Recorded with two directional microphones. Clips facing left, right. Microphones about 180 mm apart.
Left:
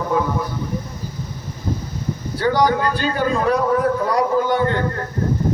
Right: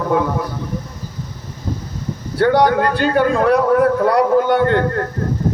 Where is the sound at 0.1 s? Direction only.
60° right (ahead or behind).